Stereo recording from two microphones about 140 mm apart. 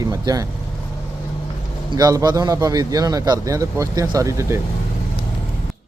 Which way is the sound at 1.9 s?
25° right (ahead or behind).